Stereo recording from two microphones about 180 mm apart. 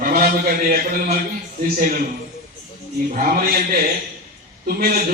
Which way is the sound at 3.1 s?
50° right (ahead or behind).